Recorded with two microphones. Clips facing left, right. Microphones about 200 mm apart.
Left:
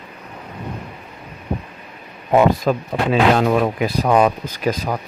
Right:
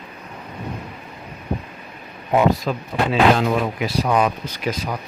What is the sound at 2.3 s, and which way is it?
Speech, 50° left (ahead or behind).